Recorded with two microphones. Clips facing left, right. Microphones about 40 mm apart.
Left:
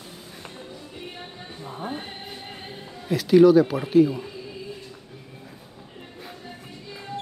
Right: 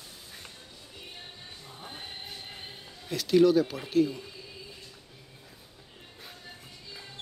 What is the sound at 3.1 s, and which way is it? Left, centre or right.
Speech, centre.